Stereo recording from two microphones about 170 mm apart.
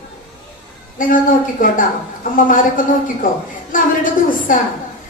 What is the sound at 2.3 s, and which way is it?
A woman's voice, 55° left (ahead or behind).